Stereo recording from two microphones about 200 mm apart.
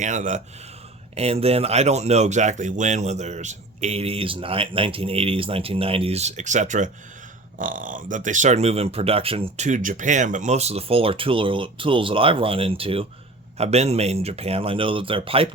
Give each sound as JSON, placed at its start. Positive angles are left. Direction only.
{"t": 0.0, "sound": "speech", "side_deg": -35}